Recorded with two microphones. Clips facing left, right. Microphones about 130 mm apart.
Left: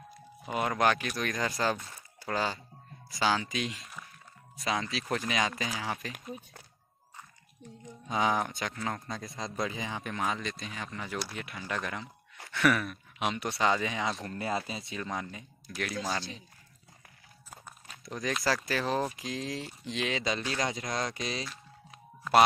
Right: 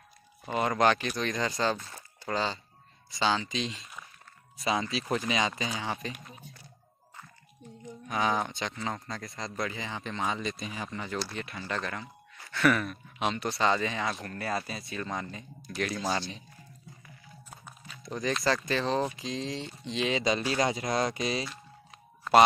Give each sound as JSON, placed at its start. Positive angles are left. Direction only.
{"t": 0.5, "sound": "speech", "side_deg": 5}
{"t": 8.1, "sound": "speech", "side_deg": 15}
{"t": 8.4, "sound": "speech", "side_deg": 0}
{"t": 9.4, "sound": "speech", "side_deg": 15}
{"t": 15.0, "sound": "speech", "side_deg": 5}
{"t": 18.0, "sound": "speech", "side_deg": 0}